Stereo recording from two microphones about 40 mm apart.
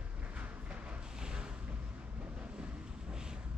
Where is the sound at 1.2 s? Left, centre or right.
Centre.